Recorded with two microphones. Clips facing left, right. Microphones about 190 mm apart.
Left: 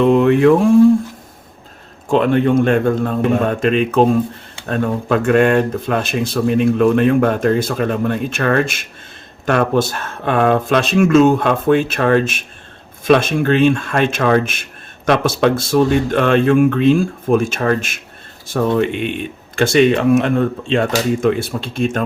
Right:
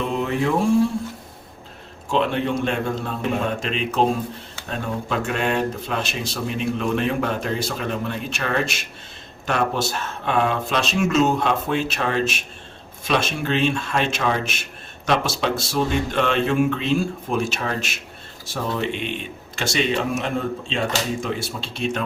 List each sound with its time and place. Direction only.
0.0 s speech: 70° left (ahead or behind)
2.0 s speech: 50° left (ahead or behind)